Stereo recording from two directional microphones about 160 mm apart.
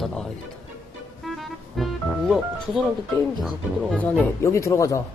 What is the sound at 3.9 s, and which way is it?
Speech, 10° left (ahead or behind).